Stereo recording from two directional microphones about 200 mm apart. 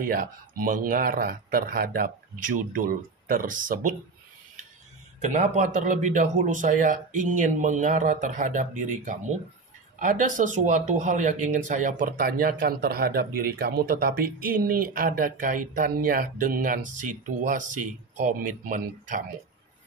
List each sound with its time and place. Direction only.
0.0 s speech: 45° right (ahead or behind)
5.2 s a man's voice: 40° right (ahead or behind)